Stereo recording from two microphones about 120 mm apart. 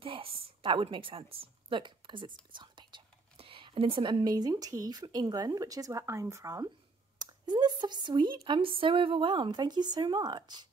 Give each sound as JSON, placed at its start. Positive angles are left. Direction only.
{"t": 0.0, "sound": "a woman's voice", "side_deg": -50}